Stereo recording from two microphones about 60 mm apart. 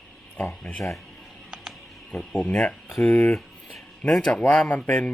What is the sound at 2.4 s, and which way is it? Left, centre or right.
Speech, left.